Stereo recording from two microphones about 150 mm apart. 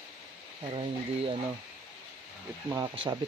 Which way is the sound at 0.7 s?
35° right (ahead or behind).